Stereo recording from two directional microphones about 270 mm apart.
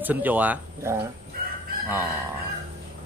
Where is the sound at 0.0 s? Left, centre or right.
Centre.